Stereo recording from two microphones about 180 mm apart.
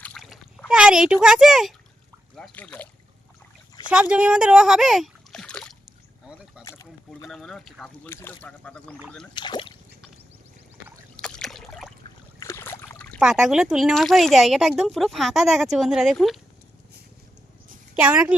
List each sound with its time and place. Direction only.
0.0 s a sound: 5° left (ahead or behind)
2.3 s speech: 5° left (ahead or behind)
3.8 s speech: 5° right (ahead or behind)
7.3 s speech: centre (ahead or behind)
9.3 s speech: 25° left (ahead or behind)
11.2 s a sound: 5° left (ahead or behind)
12.4 s boat: 15° left (ahead or behind)
13.1 s speech: 5° right (ahead or behind)
18.0 s a woman's voice: 5° right (ahead or behind)